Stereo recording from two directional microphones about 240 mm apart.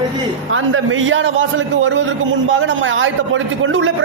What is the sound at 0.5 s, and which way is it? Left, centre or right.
A man's voice, right.